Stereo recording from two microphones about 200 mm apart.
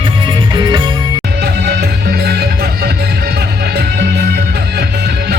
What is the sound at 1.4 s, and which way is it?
Music, 50° right (ahead or behind).